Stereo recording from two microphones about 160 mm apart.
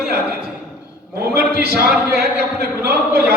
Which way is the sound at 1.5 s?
90° right.